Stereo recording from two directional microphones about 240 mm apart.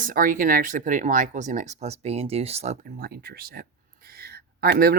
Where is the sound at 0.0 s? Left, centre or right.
Right.